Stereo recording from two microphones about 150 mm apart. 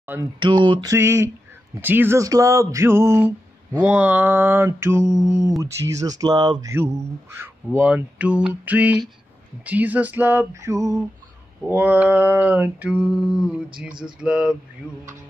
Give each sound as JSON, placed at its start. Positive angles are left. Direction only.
{"t": 0.0, "sound": "speech", "side_deg": -15}
{"t": 0.4, "sound": "a sound", "side_deg": -30}
{"t": 0.9, "sound": "speech", "side_deg": -15}